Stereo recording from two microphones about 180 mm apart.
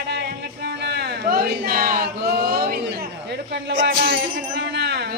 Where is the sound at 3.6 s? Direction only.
65° right (ahead or behind).